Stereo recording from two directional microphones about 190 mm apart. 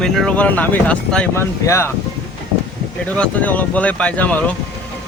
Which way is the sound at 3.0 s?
5° left (ahead or behind).